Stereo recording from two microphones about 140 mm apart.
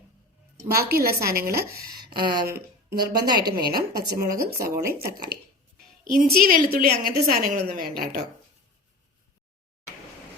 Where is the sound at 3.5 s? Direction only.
90° right.